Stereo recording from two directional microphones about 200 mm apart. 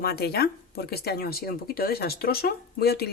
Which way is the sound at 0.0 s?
50° left (ahead or behind).